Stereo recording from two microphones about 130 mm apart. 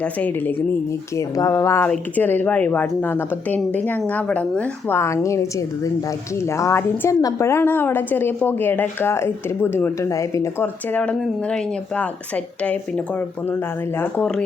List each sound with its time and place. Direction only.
0.0 s a woman's voice: 10° left (ahead or behind)